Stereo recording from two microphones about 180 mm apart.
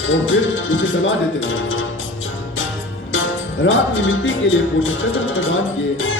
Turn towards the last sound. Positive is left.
turn(degrees=90)